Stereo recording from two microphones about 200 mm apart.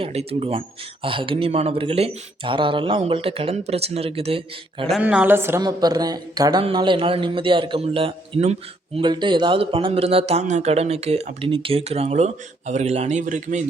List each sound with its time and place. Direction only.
0.0 s speech: 30° right (ahead or behind)
4.9 s speech: 5° right (ahead or behind); by 13.7 s 40° right (ahead or behind)